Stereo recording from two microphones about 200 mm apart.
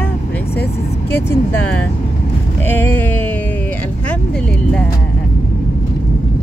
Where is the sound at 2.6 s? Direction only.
10° left (ahead or behind).